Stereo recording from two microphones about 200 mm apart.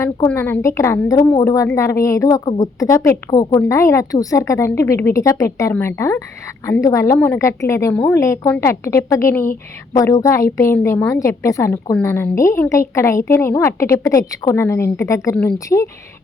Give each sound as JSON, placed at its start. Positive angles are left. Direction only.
{"t": 0.0, "sound": "a woman's voice", "side_deg": 15}